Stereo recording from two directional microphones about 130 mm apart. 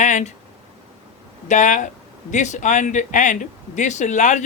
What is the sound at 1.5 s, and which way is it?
A man's voice, 70° left (ahead or behind).